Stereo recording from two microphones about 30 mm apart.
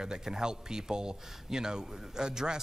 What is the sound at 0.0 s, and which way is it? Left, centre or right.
A man's voice, right.